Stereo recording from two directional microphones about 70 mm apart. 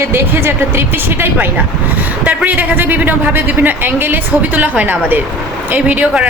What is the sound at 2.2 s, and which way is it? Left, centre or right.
A man's voice, right.